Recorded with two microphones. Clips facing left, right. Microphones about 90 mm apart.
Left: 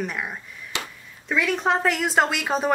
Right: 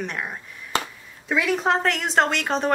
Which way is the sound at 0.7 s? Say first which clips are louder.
Right 6 dB; 40° right (ahead or behind).